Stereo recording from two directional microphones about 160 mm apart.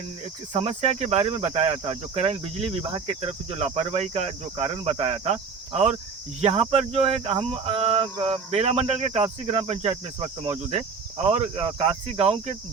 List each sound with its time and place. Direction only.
0.5 s cricket: 40° right (ahead or behind)